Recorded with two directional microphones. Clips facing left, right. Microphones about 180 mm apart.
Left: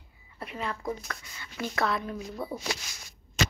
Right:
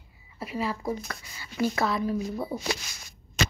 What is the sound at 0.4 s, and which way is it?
A woman's voice, 5° right (ahead or behind).